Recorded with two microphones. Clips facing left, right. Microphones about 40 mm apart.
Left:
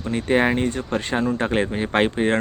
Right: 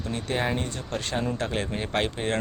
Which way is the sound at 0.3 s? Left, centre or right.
Left.